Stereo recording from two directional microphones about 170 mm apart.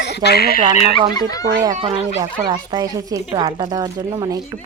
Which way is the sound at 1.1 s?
20° left (ahead or behind).